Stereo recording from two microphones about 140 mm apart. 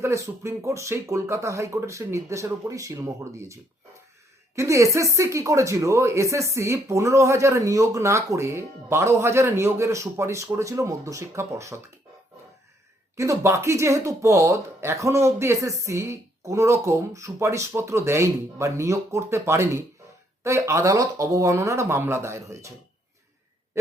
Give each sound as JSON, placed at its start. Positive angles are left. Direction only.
{"t": 0.0, "sound": "speech", "side_deg": -20}
{"t": 13.1, "sound": "speech", "side_deg": -20}